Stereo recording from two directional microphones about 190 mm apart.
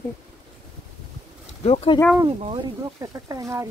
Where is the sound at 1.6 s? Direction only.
35° left (ahead or behind).